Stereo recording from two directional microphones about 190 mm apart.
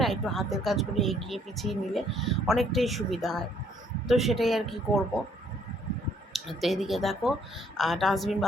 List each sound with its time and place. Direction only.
0.0 s speech: centre (ahead or behind)
6.3 s speech: centre (ahead or behind)